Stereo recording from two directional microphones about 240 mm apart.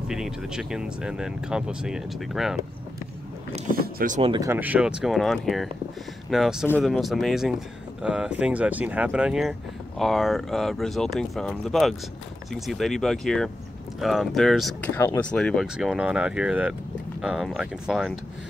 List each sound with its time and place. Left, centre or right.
0.1 s speech: centre
3.5 s speech: right
4.2 s speech: centre